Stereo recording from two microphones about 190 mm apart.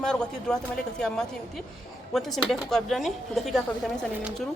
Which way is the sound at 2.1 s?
Centre (ahead or behind).